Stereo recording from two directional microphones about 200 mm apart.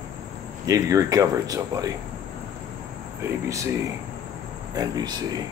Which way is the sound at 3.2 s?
15° right (ahead or behind).